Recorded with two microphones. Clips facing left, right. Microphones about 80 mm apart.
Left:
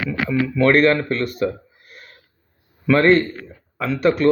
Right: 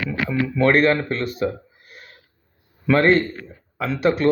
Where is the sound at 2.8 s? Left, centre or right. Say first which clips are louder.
Left 2 dB; centre.